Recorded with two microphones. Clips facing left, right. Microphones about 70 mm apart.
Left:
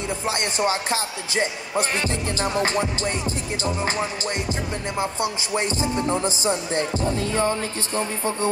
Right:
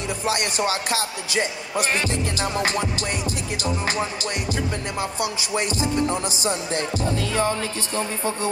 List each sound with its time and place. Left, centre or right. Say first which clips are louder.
0.2 s speech: right 1 dB; left
3.6 s music: even; left
7.3 s speech: even; left